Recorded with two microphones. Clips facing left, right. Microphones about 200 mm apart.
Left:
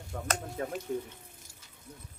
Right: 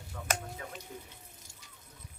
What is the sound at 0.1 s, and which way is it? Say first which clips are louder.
Speech: left 3 dB; 45° left (ahead or behind).